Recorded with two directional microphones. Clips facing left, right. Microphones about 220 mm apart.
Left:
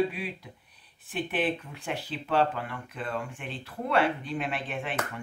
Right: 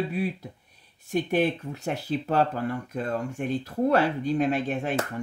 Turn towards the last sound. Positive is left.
turn(degrees=-40)  # may be behind; listen again after turning